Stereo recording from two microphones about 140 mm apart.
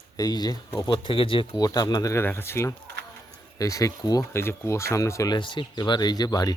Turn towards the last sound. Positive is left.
turn(degrees=30)  # may be behind; listen again after turning